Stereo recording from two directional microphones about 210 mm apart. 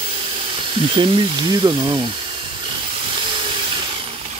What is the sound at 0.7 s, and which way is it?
Speech, 25° right (ahead or behind).